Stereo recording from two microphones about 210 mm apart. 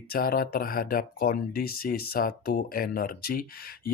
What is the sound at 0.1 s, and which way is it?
Speech, 45° left (ahead or behind).